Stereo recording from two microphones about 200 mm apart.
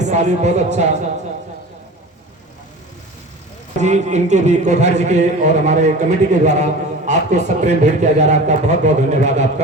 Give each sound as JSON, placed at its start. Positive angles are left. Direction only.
{"t": 0.0, "sound": "a man's voice", "side_deg": -35}
{"t": 3.8, "sound": "a man's voice", "side_deg": -35}